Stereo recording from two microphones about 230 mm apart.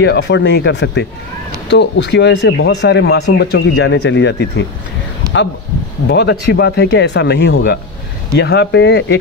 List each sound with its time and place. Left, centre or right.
0.0 s speech: left
6.0 s speech: left